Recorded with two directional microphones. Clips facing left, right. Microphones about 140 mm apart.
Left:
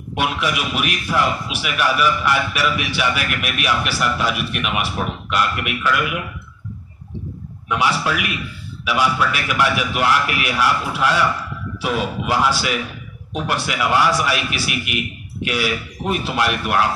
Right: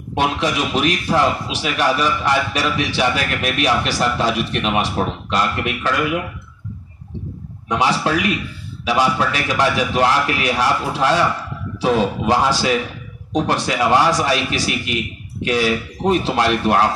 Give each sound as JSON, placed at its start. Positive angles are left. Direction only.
{"t": 0.1, "sound": "speech", "side_deg": -25}
{"t": 7.7, "sound": "speech", "side_deg": -30}
{"t": 13.3, "sound": "a man's voice", "side_deg": -35}
{"t": 15.4, "sound": "speech", "side_deg": -35}